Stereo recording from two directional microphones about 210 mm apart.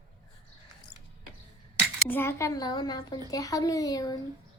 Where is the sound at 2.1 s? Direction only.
10° left (ahead or behind).